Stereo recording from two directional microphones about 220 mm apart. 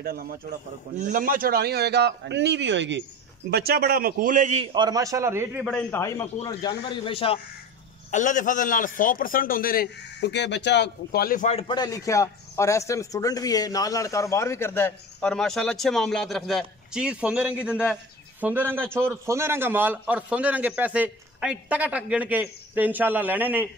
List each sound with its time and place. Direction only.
0.0 s a man's voice: 40° right (ahead or behind); by 5.7 s 10° right (ahead or behind)
5.7 s a man's voice: 10° left (ahead or behind); by 7.3 s 25° left (ahead or behind)
8.1 s a man's voice: 35° left (ahead or behind); by 23.7 s 10° right (ahead or behind)